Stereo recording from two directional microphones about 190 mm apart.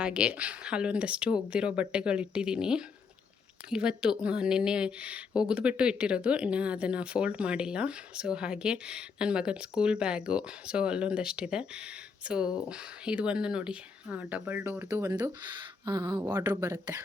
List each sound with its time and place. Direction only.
0.0 s speech: 5° right (ahead or behind)